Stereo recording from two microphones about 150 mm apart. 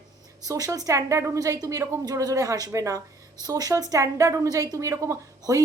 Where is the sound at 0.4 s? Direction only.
25° right (ahead or behind).